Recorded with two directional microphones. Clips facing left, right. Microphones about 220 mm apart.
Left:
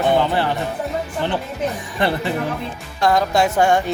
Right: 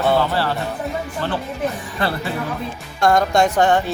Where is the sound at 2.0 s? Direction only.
20° left (ahead or behind).